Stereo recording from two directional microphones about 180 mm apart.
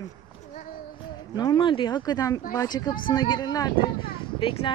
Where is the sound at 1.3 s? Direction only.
25° left (ahead or behind).